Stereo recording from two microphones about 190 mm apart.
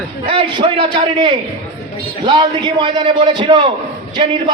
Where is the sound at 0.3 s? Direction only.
25° right (ahead or behind).